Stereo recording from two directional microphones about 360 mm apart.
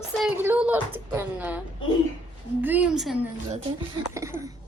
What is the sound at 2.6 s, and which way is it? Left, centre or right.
Speech, centre.